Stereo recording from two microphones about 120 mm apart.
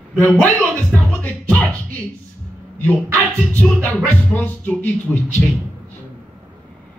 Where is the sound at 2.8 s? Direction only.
15° left (ahead or behind).